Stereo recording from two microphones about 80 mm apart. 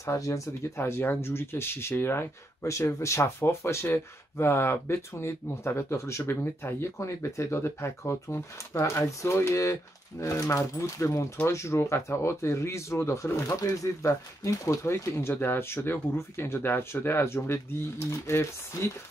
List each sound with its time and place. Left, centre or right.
0.0 s speech: left